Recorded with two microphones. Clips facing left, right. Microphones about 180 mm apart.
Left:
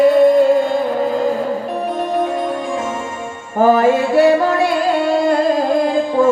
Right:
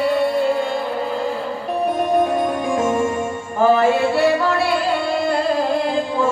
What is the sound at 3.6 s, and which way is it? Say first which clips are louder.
Music: left 3 dB; 45° left (ahead or behind).